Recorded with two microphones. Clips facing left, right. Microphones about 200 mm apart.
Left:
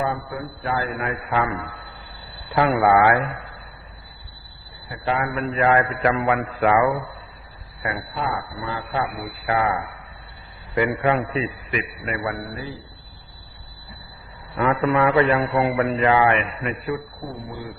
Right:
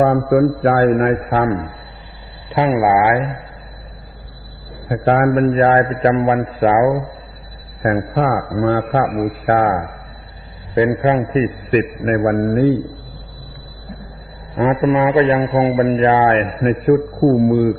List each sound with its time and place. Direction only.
0.0 s a man's voice: 55° right (ahead or behind); by 1.7 s 35° right (ahead or behind)
2.5 s speech: 20° right (ahead or behind)
4.9 s a man's voice: 50° right (ahead or behind); by 7.1 s 35° right (ahead or behind)
7.8 s a man's voice: 50° right (ahead or behind)
10.8 s a man's voice: 25° right (ahead or behind); by 12.7 s 55° right (ahead or behind)
14.5 s a man's voice: 20° right (ahead or behind); by 17.7 s 60° right (ahead or behind)